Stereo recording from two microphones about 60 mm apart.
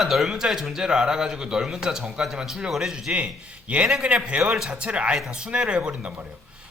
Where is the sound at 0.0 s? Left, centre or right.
Centre.